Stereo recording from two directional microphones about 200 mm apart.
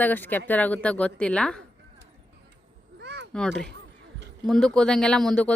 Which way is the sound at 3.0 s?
60° right (ahead or behind).